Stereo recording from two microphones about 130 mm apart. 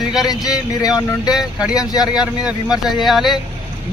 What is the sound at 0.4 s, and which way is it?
Speech, 30° left (ahead or behind).